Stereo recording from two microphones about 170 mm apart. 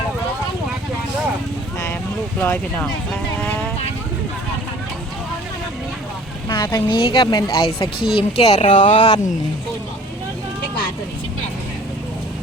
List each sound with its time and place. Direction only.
2.4 s speech: 10° left (ahead or behind)
6.5 s a woman's voice: 25° left (ahead or behind); by 8.8 s 40° left (ahead or behind)
9.0 s a woman's voice: 25° left (ahead or behind)